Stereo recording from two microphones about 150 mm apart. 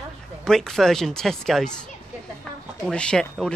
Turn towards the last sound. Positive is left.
turn(degrees=5)  # may be behind; listen again after turning